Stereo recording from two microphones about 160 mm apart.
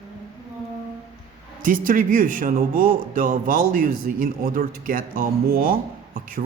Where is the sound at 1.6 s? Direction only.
60° right (ahead or behind).